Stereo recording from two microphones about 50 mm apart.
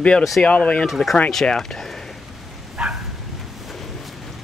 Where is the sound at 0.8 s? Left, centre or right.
Centre.